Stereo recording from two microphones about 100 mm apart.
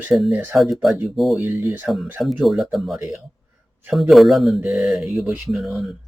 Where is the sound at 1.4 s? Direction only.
20° right (ahead or behind).